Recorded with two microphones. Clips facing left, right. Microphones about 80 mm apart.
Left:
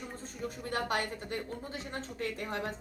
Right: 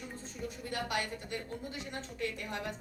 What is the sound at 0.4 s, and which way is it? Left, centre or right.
A woman's voice, left.